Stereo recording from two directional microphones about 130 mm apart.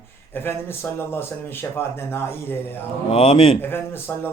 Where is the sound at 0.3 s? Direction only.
15° left (ahead or behind).